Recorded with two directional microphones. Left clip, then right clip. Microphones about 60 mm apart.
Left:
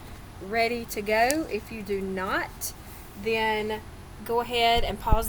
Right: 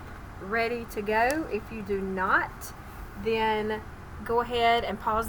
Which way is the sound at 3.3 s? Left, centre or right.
Centre.